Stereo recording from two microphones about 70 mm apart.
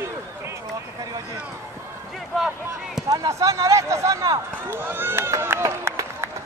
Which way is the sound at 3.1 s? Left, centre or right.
Right.